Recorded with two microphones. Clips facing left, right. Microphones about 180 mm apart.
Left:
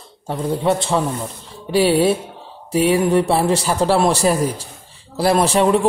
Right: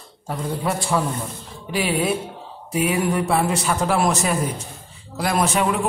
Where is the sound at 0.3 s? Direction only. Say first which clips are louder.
Left 6 dB; 25° left (ahead or behind).